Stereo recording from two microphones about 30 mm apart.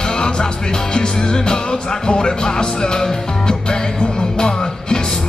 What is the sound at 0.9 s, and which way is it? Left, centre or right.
Music, left.